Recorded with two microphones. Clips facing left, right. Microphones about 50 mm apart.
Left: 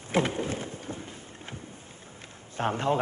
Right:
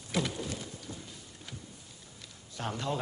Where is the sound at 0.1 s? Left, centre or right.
Left.